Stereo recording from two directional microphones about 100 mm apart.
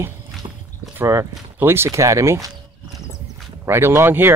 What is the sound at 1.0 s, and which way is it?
Speech, 30° right (ahead or behind).